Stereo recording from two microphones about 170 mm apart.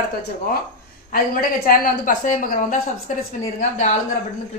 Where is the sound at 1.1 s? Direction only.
55° left (ahead or behind).